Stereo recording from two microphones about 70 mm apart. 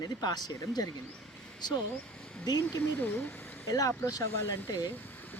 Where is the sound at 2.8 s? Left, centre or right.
Left.